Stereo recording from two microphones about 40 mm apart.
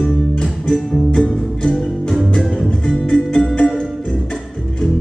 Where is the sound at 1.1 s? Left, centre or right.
Centre.